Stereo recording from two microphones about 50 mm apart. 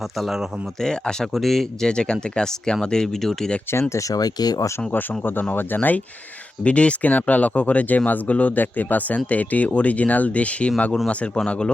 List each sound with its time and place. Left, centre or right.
0.2 s speech: centre
0.8 s speech: centre
1.9 s speech: centre
3.7 s speech: left
4.9 s speech: left
6.7 s speech: left